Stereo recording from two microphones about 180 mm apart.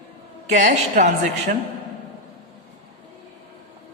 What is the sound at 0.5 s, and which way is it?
A woman's voice, 40° right (ahead or behind).